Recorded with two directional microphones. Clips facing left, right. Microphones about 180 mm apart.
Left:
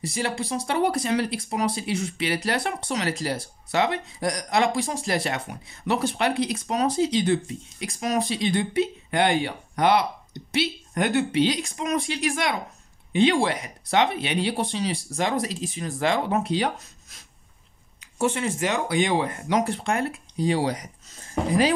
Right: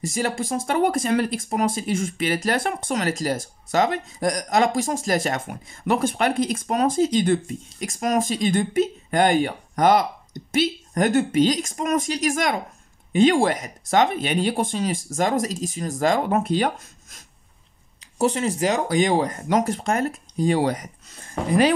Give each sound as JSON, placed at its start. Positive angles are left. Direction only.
{"t": 0.0, "sound": "speech", "side_deg": -45}
{"t": 18.1, "sound": "speech", "side_deg": -40}